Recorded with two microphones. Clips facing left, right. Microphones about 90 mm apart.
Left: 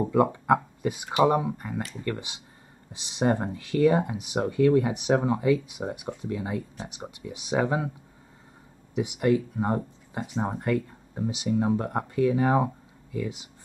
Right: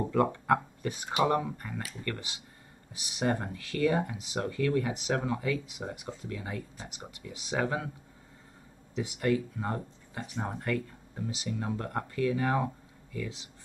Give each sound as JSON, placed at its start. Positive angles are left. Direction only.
{"t": 0.0, "sound": "speech", "side_deg": 15}
{"t": 8.9, "sound": "speech", "side_deg": 15}